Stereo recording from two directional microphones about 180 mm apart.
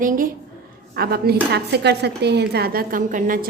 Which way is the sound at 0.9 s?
60° right (ahead or behind).